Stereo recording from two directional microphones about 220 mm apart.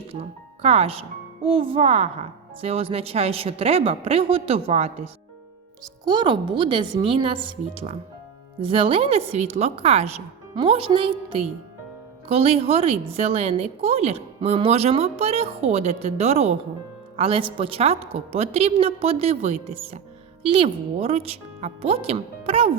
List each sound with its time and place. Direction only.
0.1 s a woman's voice: 25° right (ahead or behind)
6.1 s a woman's voice: 20° right (ahead or behind)
8.6 s a woman's voice: 25° right (ahead or behind)